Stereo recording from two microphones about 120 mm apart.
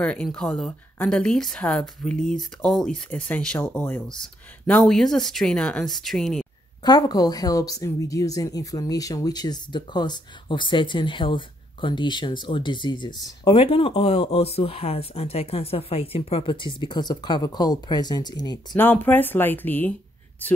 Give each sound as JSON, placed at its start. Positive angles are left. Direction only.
{"t": 0.0, "sound": "a woman's voice", "side_deg": 10}
{"t": 6.8, "sound": "speech", "side_deg": 35}
{"t": 13.6, "sound": "speech", "side_deg": 50}
{"t": 18.8, "sound": "a woman's voice", "side_deg": 15}